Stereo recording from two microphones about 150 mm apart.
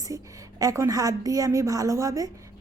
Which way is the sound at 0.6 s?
20° right (ahead or behind).